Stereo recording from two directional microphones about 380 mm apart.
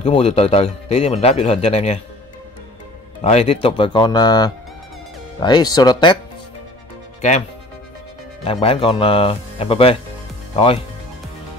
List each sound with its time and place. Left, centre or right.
0.0 s speech: centre
3.3 s speech: centre
7.2 s speech: centre
8.5 s speech: centre